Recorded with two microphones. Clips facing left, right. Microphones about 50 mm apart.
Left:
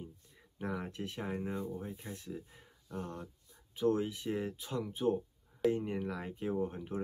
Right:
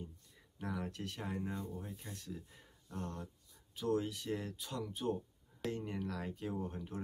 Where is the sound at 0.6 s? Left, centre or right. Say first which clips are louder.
Left 3 dB; left.